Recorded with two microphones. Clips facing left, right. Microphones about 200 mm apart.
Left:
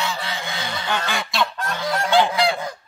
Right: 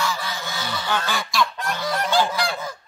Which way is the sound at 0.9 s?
20° left (ahead or behind).